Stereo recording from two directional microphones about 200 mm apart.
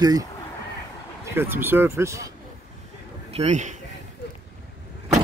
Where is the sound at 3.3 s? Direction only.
35° right (ahead or behind).